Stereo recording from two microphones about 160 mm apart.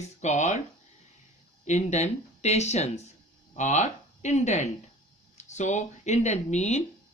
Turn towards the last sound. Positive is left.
turn(degrees=45)  # may be behind; listen again after turning